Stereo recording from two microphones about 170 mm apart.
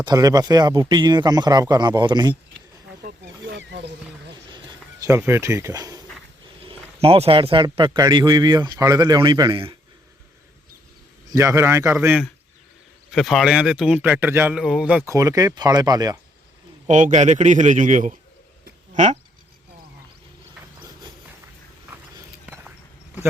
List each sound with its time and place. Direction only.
0.0 s speech: 20° right (ahead or behind)
3.5 s a sound: 90° right
5.0 s speech: 15° right (ahead or behind)
6.7 s speech: 35° right (ahead or behind)
11.3 s a man's voice: 15° right (ahead or behind)
13.1 s a man's voice: centre (ahead or behind)
15.1 s speech: 20° right (ahead or behind)
16.9 s a man's voice: 45° right (ahead or behind)
22.4 s a sound: 10° right (ahead or behind)